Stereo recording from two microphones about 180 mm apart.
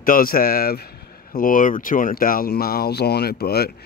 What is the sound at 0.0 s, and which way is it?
Speech, 50° left (ahead or behind).